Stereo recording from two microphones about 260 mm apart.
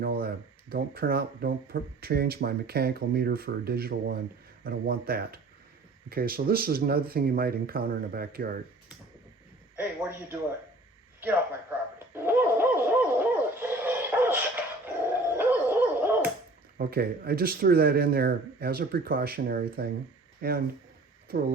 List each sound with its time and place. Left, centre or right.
0.0 s speech: right
9.7 s a man's voice: centre
12.1 s dog: centre
16.7 s speech: right